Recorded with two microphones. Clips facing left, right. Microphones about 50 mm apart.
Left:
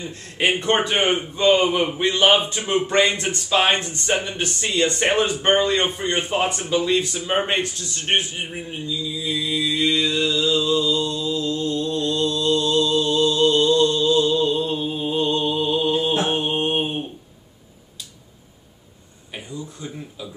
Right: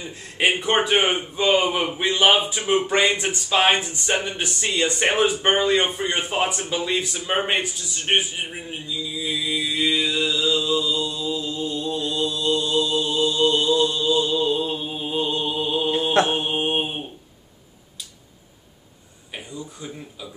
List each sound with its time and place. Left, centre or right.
0.0 s a man's voice: centre
16.0 s mantra: right
16.3 s mantra: centre
19.3 s a sound: centre